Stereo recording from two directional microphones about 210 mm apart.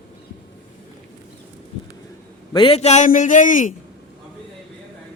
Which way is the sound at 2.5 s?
25° left (ahead or behind).